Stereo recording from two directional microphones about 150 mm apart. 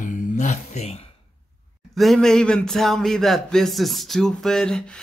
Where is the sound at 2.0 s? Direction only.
Centre (ahead or behind).